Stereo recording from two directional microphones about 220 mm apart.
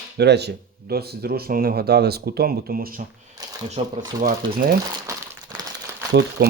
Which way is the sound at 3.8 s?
30° right (ahead or behind).